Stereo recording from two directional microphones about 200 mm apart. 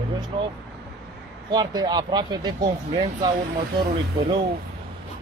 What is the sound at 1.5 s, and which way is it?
Speech, 20° right (ahead or behind).